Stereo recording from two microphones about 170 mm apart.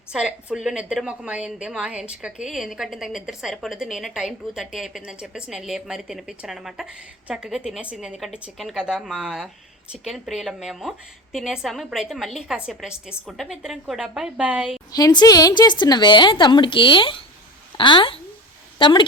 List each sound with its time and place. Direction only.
0.1 s a woman's voice: 5° right (ahead or behind)
14.9 s a woman's voice: 25° left (ahead or behind)